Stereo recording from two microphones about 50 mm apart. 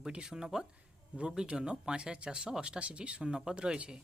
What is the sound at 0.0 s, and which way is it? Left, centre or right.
Speech, centre.